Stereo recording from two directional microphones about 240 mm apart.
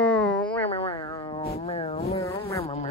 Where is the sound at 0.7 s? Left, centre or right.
Left.